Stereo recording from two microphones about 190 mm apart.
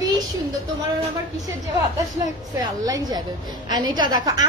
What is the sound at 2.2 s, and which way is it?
Speech, 20° right (ahead or behind).